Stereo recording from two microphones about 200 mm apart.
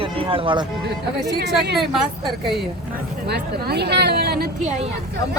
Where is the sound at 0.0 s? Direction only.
25° right (ahead or behind).